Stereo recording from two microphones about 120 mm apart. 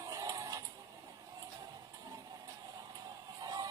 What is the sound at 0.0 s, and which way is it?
Mechanisms, 30° right (ahead or behind).